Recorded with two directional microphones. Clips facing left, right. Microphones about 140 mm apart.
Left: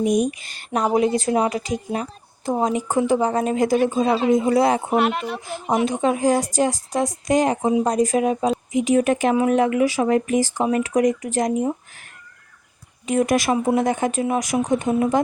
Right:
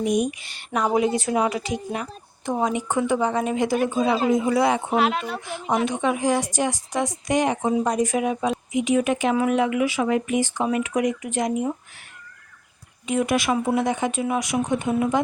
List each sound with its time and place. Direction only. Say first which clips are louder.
0.0 s a woman's voice: left 3 dB; 40° left (ahead or behind)
4.9 s speech: left 2 dB; centre (ahead or behind)
5.5 s speech: left 3 dB; 40° left (ahead or behind)
13.1 s speech: left 3 dB; 40° left (ahead or behind)